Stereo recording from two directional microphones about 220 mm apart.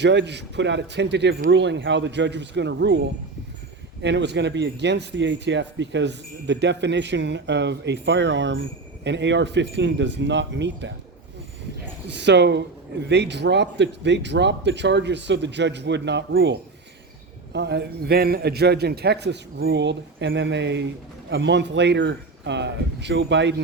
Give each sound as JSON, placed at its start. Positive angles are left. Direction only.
{"t": 0.0, "sound": "speech", "side_deg": -50}
{"t": 4.0, "sound": "speech", "side_deg": -50}
{"t": 12.0, "sound": "speech", "side_deg": -50}